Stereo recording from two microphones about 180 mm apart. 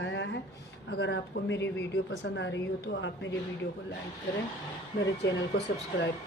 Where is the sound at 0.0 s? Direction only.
90° left.